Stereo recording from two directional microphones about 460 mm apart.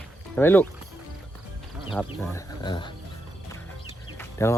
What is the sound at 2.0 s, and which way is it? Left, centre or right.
Speech, centre.